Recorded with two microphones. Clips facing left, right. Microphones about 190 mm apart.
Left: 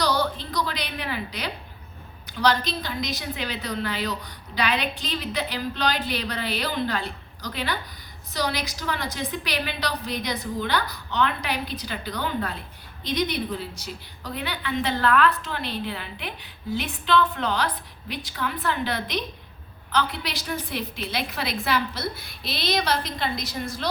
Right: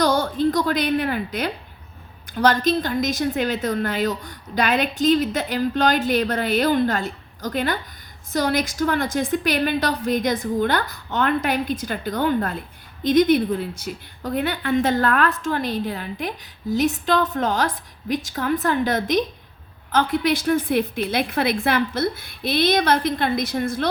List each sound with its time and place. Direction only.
0.0 s a woman's voice: 50° right (ahead or behind)